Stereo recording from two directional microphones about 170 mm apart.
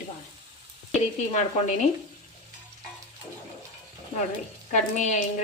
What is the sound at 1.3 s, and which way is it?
Speech, 45° left (ahead or behind).